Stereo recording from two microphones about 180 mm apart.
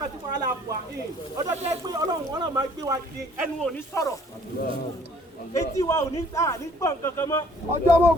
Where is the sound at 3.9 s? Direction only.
15° left (ahead or behind).